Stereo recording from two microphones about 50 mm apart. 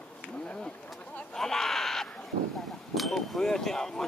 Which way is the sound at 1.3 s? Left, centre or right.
Centre.